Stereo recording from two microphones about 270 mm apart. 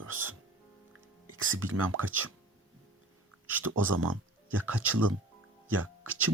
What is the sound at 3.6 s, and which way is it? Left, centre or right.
Speech, right.